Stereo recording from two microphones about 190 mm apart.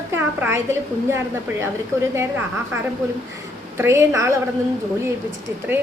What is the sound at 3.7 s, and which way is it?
Speech, 15° right (ahead or behind).